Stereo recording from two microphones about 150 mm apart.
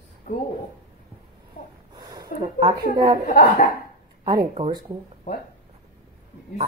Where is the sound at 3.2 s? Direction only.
90° left.